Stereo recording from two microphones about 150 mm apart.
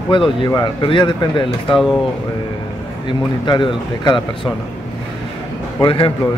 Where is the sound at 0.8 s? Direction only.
30° left (ahead or behind).